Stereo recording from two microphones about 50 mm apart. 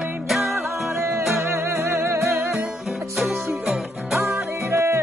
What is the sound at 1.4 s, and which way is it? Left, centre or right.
Music, right.